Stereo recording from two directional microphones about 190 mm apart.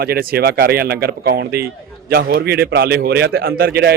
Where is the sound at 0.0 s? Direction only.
55° right (ahead or behind).